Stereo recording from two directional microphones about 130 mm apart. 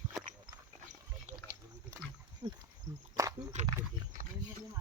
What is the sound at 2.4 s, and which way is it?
Pig, 35° right (ahead or behind).